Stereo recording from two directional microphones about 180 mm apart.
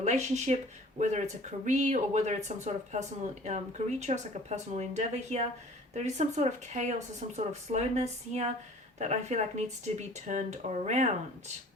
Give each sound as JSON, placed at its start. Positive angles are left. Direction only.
{"t": 0.0, "sound": "speech", "side_deg": -40}